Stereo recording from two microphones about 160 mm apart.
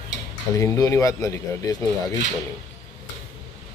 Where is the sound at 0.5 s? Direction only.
20° left (ahead or behind).